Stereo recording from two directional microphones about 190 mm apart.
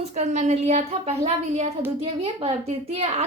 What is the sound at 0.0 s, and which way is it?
A woman's voice, 35° right (ahead or behind).